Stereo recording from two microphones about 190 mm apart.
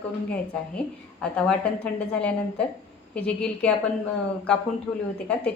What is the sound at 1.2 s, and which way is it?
A woman's voice, 5° left (ahead or behind).